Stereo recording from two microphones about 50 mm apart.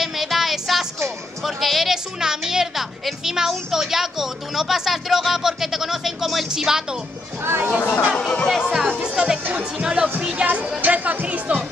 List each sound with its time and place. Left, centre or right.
0.0 s music: centre
3.3 s a woman's voice: centre
7.4 s speech: right
8.2 s speech: centre
8.5 s music: centre
9.8 s speech: centre
10.4 s music: right